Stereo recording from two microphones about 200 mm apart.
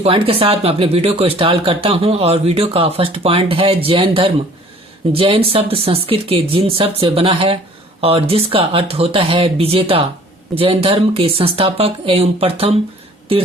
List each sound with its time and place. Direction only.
0.0 s speech: 30° right (ahead or behind)